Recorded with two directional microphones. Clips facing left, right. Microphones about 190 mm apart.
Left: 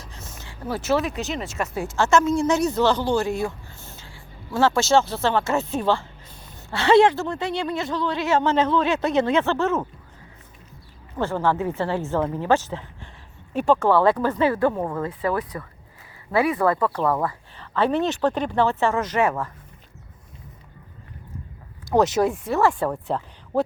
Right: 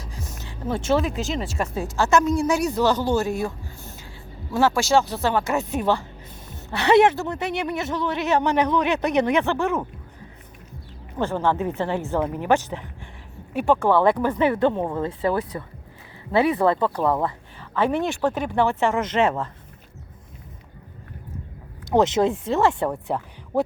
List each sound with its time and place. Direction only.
0.4 s speech: 25° right (ahead or behind)
1.2 s speech: centre (ahead or behind)
2.0 s speech: 15° right (ahead or behind)
3.8 s whispering: 15° right (ahead or behind)
4.5 s speech: 15° right (ahead or behind)
11.2 s speech: 15° right (ahead or behind)
21.8 s speech: 20° right (ahead or behind)